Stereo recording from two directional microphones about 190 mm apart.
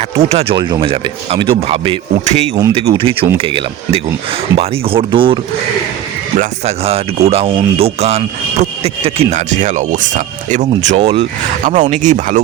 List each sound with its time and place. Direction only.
0.2 s a man's voice: 35° right (ahead or behind)
10.8 s a man's voice: 30° right (ahead or behind)